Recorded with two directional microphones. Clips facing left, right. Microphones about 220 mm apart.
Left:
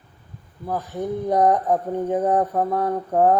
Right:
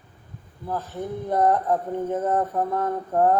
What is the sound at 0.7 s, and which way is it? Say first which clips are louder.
Speech: left 4 dB; 15° left (ahead or behind).